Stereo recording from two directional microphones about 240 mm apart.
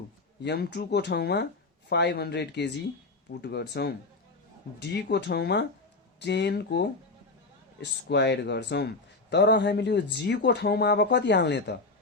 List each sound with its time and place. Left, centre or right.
0.4 s speech: left